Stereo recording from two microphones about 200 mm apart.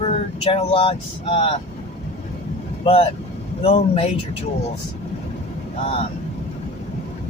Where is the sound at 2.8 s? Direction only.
30° left (ahead or behind).